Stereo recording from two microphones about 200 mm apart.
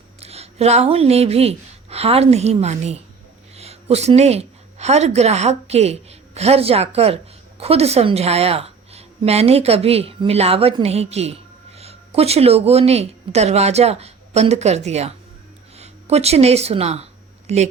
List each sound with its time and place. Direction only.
0.2 s a woman's voice: 30° right (ahead or behind)